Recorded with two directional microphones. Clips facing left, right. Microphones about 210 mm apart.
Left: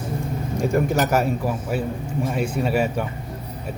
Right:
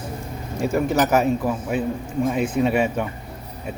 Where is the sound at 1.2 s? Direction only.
10° left (ahead or behind).